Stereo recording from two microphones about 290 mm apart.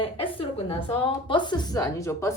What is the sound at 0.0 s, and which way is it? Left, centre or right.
A woman's voice, centre.